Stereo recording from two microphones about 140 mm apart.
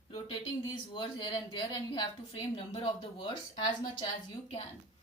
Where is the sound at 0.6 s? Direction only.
35° left (ahead or behind).